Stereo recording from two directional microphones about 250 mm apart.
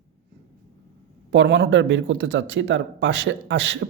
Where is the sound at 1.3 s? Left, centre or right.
Right.